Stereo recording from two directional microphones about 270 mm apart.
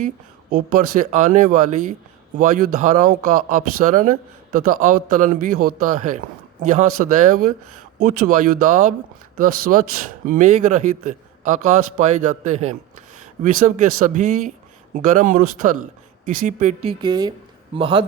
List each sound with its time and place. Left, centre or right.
0.5 s a man's voice: right
7.3 s a man's voice: right